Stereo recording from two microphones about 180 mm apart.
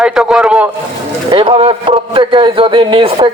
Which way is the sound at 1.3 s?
30° right (ahead or behind).